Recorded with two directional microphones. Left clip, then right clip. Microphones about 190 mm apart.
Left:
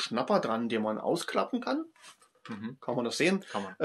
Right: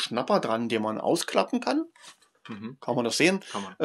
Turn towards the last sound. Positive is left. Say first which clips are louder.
# right 5 dB
turn(degrees=-50)  # may be behind; listen again after turning